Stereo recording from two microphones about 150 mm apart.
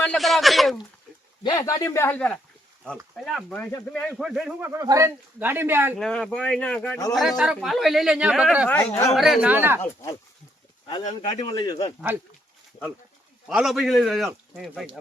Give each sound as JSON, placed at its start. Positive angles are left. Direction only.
{"t": 0.0, "sound": "speech", "side_deg": 5}
{"t": 1.5, "sound": "speech", "side_deg": 25}
{"t": 4.2, "sound": "speech", "side_deg": -5}
{"t": 4.6, "sound": "speech", "side_deg": -20}
{"t": 6.0, "sound": "speech", "side_deg": 5}
{"t": 8.7, "sound": "speech", "side_deg": 10}
{"t": 9.1, "sound": "speech", "side_deg": 0}
{"t": 9.8, "sound": "speech", "side_deg": 20}
{"t": 11.0, "sound": "speech", "side_deg": 40}
{"t": 13.5, "sound": "speech", "side_deg": -5}